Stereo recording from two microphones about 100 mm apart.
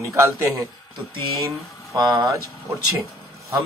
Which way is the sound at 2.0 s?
45° right (ahead or behind).